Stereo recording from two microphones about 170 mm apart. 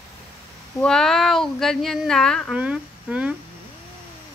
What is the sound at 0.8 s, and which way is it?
Speech, 5° left (ahead or behind).